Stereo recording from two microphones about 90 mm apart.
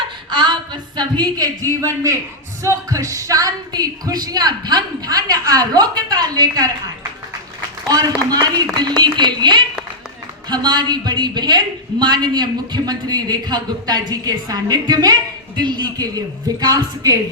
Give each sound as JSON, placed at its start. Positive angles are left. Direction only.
{"t": 0.3, "sound": "a woman's voice", "side_deg": -55}
{"t": 7.9, "sound": "a woman's voice", "side_deg": -45}